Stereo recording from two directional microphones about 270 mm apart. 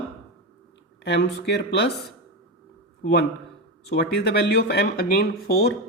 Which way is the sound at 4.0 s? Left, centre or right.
Left.